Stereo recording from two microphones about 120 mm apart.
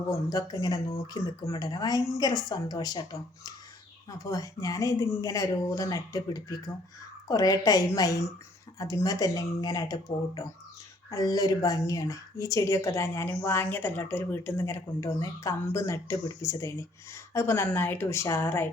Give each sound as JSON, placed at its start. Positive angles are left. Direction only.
{"t": 0.0, "sound": "a woman's voice", "side_deg": 30}